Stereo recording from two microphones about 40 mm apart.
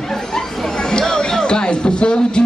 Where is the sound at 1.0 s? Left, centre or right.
Centre.